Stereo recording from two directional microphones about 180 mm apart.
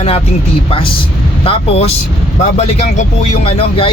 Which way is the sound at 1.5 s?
35° left (ahead or behind).